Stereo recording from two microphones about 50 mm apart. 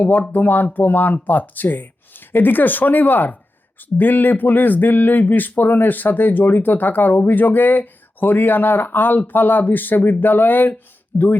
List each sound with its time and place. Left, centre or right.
0.0 s speech: left